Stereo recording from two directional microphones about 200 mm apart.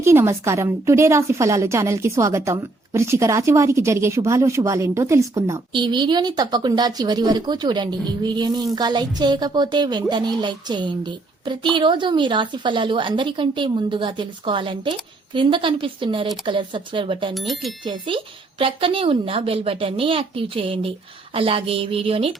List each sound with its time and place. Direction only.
0.0 s a woman's voice: 15° right (ahead or behind)
17.3 s speech: centre (ahead or behind)
17.8 s a woman's voice: 25° right (ahead or behind)